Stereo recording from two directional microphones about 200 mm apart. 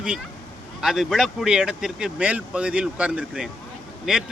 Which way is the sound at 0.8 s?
Centre (ahead or behind).